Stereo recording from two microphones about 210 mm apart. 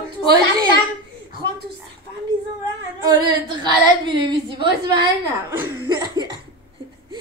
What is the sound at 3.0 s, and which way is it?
Speech, 20° right (ahead or behind).